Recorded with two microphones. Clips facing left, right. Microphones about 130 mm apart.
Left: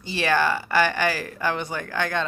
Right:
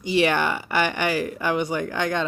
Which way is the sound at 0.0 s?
15° right (ahead or behind).